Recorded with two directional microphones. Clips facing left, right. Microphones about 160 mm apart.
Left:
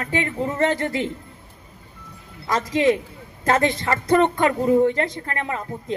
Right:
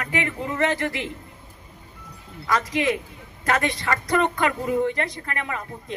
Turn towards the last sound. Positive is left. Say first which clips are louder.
# left 5 dB
turn(degrees=30)  # may be behind; listen again after turning